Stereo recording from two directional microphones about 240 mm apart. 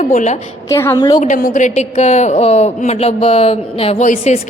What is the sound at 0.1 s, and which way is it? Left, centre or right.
Speech, left.